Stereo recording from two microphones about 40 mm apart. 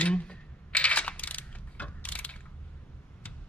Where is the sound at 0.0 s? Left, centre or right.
Left.